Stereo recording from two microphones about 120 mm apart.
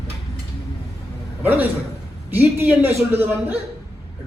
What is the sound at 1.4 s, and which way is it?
A man's voice, 15° right (ahead or behind).